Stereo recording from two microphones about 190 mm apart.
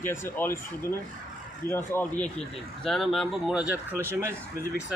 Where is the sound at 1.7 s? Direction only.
10° left (ahead or behind); by 4.7 s 15° right (ahead or behind).